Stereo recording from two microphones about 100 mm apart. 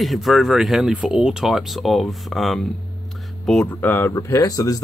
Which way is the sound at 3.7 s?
20° left (ahead or behind).